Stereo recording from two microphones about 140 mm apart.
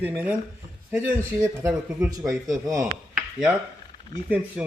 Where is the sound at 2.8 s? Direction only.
5° right (ahead or behind).